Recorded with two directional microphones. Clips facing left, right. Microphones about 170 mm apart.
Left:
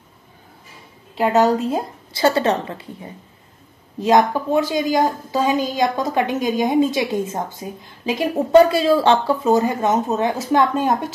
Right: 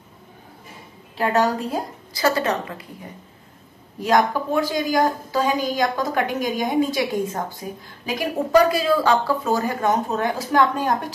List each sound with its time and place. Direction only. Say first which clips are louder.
1.1 s a woman's voice: left 4 dB; 20° left (ahead or behind)